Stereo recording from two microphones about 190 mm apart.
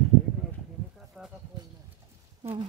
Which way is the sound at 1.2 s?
Centre (ahead or behind).